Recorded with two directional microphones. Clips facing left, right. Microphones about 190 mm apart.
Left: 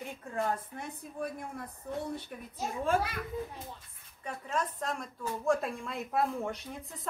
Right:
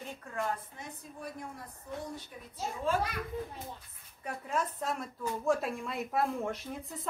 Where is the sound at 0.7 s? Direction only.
55° left (ahead or behind).